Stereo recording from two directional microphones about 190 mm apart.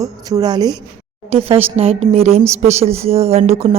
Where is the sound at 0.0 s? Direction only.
20° right (ahead or behind).